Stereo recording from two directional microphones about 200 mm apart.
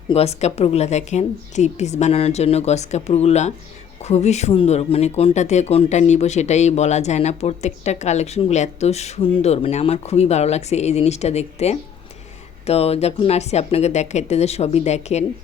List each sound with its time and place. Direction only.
0.1 s speech: 30° left (ahead or behind)